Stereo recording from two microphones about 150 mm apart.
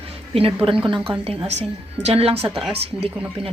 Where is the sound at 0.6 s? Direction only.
35° right (ahead or behind).